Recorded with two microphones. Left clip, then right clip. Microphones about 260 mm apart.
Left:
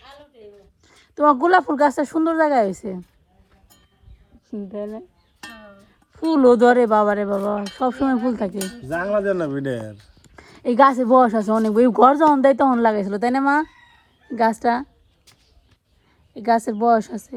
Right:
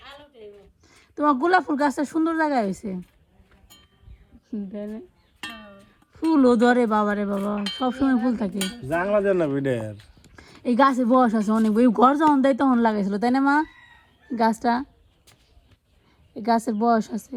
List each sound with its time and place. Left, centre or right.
0.9 s speech: centre
4.7 s speech: left
6.1 s speech: centre
10.3 s speech: centre
16.3 s speech: centre